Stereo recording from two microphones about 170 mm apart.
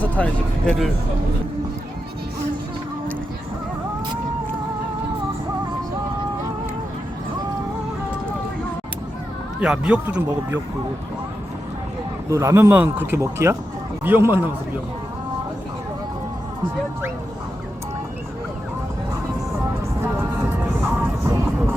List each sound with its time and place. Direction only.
0.0 s speech: 10° left (ahead or behind)
9.6 s speech: 5° right (ahead or behind)
12.3 s speech: 15° right (ahead or behind)
21.0 s music: 10° right (ahead or behind)